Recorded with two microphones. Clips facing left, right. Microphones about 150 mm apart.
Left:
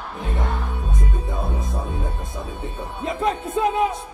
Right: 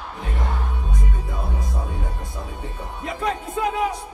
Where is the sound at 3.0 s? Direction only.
25° left (ahead or behind).